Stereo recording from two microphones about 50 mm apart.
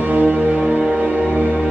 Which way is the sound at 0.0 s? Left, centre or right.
Right.